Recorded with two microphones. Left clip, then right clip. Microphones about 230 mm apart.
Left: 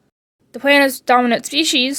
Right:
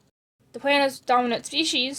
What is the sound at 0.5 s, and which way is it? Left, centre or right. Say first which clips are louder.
Speech: left 8 dB; left.